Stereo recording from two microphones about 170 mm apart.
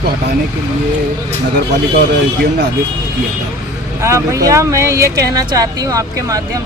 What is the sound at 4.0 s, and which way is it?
Speech, 15° right (ahead or behind).